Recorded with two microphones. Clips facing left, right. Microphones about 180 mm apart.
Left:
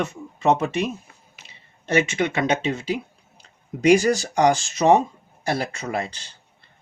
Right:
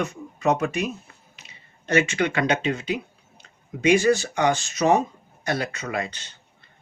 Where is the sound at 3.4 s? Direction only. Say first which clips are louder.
Left 4 dB; 35° left (ahead or behind).